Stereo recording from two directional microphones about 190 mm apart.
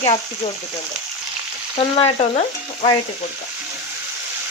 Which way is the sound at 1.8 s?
30° left (ahead or behind).